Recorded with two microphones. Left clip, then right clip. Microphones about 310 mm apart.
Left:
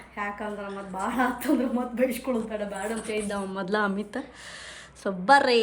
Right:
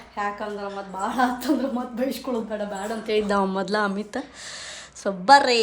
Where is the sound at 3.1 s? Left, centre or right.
Right.